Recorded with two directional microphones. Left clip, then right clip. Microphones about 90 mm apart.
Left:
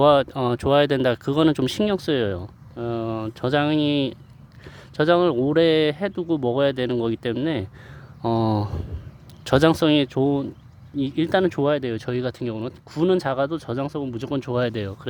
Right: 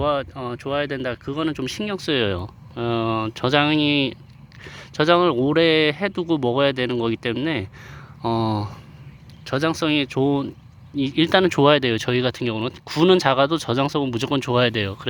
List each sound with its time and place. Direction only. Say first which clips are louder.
0.0 s speech: left 6 dB; 85° left; by 1.9 s 60° left (ahead or behind)
1.9 s speech: left 2 dB; 35° left (ahead or behind)
2.3 s speech: right 3 dB; centre (ahead or behind); by 8.7 s 30° left (ahead or behind)
9.4 s speech: left 5 dB; 90° left
9.6 s speech: left 3 dB; 50° left (ahead or behind)
9.9 s speech: left 1 dB; 30° left (ahead or behind)
10.2 s speech: right 1 dB; 15° left (ahead or behind)
11.6 s speech: right 6 dB; 5° right (ahead or behind)